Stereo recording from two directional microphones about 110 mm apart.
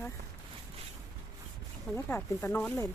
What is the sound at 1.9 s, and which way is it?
Speech, 20° left (ahead or behind).